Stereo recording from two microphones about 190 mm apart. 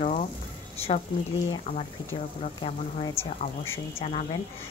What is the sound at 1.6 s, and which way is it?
A woman's voice, 35° left (ahead or behind).